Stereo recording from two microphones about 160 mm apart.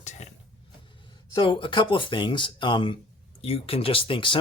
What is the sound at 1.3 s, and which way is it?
Speech, 30° left (ahead or behind).